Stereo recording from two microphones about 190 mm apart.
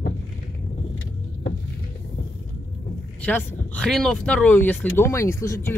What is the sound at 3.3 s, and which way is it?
Speech, 5° left (ahead or behind).